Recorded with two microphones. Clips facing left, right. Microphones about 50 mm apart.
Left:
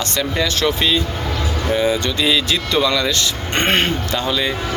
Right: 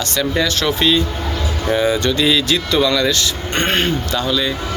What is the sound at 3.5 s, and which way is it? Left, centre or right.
Speech, left.